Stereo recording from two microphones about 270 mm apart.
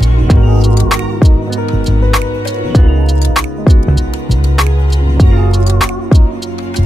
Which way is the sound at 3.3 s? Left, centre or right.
Centre.